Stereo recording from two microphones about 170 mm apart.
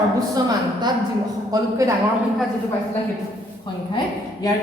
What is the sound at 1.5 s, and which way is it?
Speech, 20° right (ahead or behind).